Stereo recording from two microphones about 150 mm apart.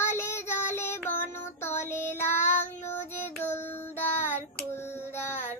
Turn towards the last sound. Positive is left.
turn(degrees=15)  # may be behind; listen again after turning